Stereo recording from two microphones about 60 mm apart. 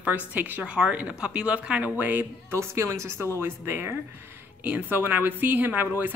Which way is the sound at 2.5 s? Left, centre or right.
Right.